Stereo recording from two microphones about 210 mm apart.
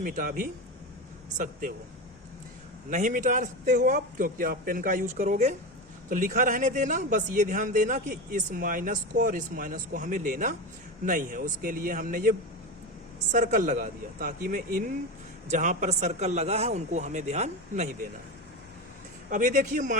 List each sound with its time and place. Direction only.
0.0 s a man's voice: 40° right (ahead or behind)
2.9 s a man's voice: 35° right (ahead or behind)
19.3 s a man's voice: 35° right (ahead or behind)